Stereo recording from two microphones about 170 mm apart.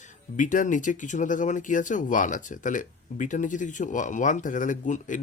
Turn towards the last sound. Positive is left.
turn(degrees=50)  # may be behind; listen again after turning